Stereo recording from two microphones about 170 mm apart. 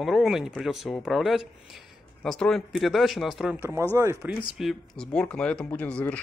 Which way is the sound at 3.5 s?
15° right (ahead or behind).